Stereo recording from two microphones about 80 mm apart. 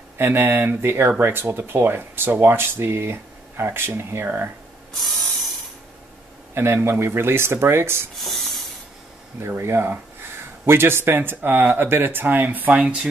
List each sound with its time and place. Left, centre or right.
0.2 s speech: right
5.0 s ratchet: centre
6.5 s speech: right
8.2 s a sound: centre
9.4 s speech: right; by 13.1 s centre